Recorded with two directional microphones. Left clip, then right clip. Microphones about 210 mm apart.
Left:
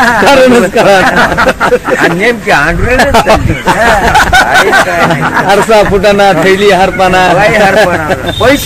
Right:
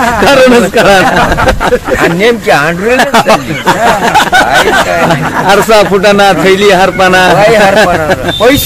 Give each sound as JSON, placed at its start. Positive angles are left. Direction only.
{"t": 0.2, "sound": "a man's voice", "side_deg": -10}
{"t": 2.2, "sound": "speech", "side_deg": -65}
{"t": 3.0, "sound": "a man's voice", "side_deg": -5}
{"t": 4.2, "sound": "a sound", "side_deg": -25}
{"t": 5.5, "sound": "a man's voice", "side_deg": -10}